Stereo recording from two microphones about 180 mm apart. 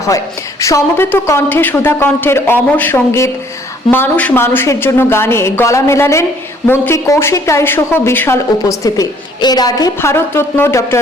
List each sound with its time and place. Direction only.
0.6 s a woman's voice: 15° left (ahead or behind)